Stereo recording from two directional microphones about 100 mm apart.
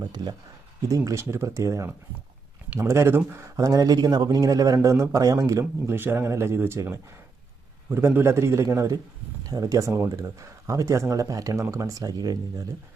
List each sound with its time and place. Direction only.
0.9 s a man's voice: 35° right (ahead or behind)
3.6 s a man's voice: 35° right (ahead or behind)